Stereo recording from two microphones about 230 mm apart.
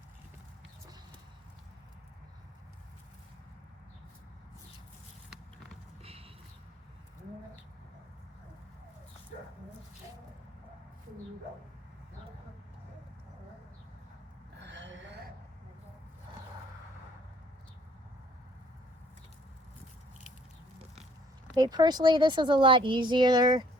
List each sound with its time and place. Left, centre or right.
6.0 s clip-clop: right
14.6 s gasp: right
21.5 s speech: centre